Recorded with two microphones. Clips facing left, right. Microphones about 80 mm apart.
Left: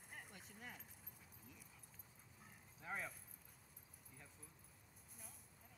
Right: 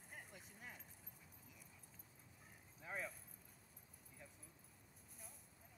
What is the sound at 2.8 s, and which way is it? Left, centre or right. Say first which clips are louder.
Keys jangling: even; centre.